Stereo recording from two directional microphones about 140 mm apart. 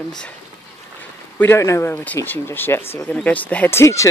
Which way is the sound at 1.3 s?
20° left (ahead or behind).